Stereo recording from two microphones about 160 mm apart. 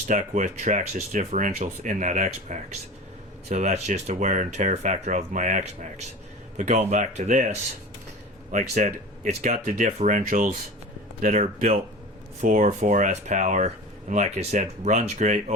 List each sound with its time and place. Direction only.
0.1 s speech: 50° right (ahead or behind)
8.5 s speech: 50° right (ahead or behind)